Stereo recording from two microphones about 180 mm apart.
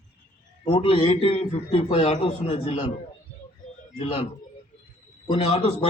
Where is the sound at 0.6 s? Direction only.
30° left (ahead or behind).